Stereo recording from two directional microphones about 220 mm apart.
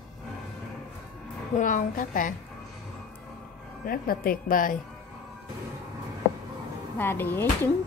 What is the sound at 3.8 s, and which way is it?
Speech, 40° left (ahead or behind).